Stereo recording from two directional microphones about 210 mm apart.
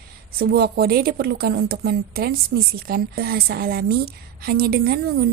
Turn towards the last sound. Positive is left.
turn(degrees=-45)  # may be behind; listen again after turning